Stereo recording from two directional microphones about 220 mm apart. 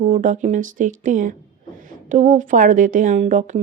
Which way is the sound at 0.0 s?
35° right (ahead or behind).